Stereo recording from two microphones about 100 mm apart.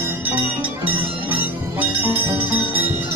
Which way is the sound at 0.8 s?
20° right (ahead or behind).